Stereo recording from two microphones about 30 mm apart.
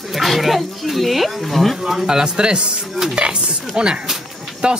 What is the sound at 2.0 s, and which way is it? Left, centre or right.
Speech, right.